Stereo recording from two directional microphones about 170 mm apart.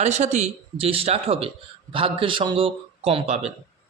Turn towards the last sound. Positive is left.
turn(degrees=-40)  # may be behind; listen again after turning